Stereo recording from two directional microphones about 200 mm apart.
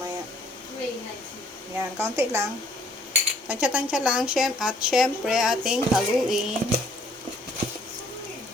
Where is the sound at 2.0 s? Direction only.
15° right (ahead or behind).